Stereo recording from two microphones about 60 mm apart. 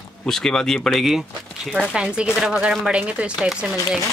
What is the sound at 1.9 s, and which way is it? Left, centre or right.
Speech, centre.